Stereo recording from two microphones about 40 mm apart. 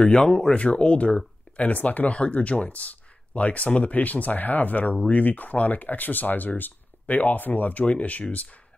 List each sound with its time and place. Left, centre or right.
0.0 s speech: centre
0.7 s speech: left
2.1 s speech: left
7.8 s speech: left